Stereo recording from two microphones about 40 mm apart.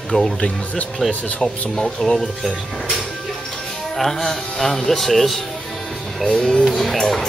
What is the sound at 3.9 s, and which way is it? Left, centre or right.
Speech, centre.